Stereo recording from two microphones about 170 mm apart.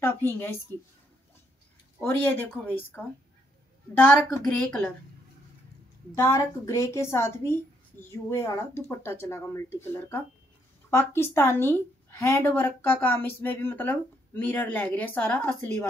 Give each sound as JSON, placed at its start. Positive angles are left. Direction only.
{"t": 0.0, "sound": "a woman's voice", "side_deg": 15}
{"t": 2.0, "sound": "a woman's voice", "side_deg": 10}
{"t": 6.1, "sound": "a woman's voice", "side_deg": 15}